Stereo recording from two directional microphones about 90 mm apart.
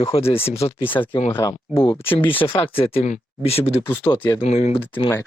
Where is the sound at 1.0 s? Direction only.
75° left (ahead or behind).